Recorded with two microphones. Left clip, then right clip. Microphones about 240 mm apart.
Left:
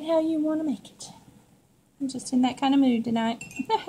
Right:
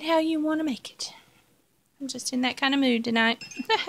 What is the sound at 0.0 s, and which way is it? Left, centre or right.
Speech, right.